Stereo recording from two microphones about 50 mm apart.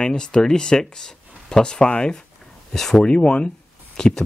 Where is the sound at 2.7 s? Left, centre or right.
Centre.